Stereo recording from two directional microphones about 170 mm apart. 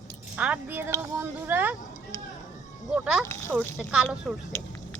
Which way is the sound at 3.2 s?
15° left (ahead or behind).